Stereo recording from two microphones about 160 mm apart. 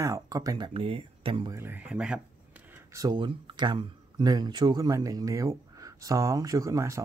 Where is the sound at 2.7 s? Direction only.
20° right (ahead or behind).